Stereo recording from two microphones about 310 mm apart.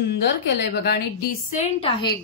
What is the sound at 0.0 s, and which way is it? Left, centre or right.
A woman's voice, left.